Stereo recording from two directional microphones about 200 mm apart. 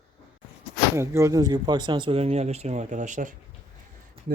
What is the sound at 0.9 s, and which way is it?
Speech, 15° right (ahead or behind).